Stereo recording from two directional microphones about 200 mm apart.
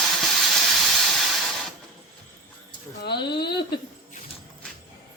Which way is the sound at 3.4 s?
55° left (ahead or behind).